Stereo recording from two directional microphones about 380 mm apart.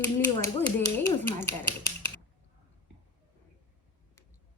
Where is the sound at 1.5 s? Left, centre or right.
Left.